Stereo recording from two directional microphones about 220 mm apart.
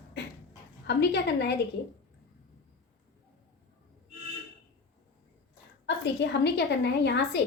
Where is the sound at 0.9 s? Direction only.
50° left (ahead or behind).